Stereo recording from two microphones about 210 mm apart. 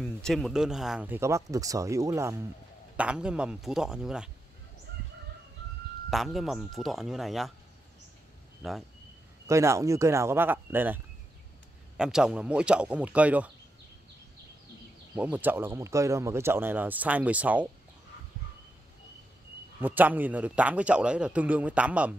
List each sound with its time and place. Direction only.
0.0 s speech: centre (ahead or behind)
6.0 s speech: centre (ahead or behind)
8.6 s speech: centre (ahead or behind)
9.5 s speech: 15° right (ahead or behind)
12.0 s speech: 5° right (ahead or behind)
15.3 s speech: 10° right (ahead or behind)
19.8 s speech: 10° right (ahead or behind)